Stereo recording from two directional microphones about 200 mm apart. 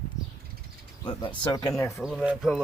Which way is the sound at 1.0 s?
25° left (ahead or behind).